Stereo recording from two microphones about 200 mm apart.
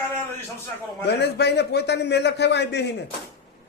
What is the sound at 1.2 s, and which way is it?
Speech, 55° left (ahead or behind).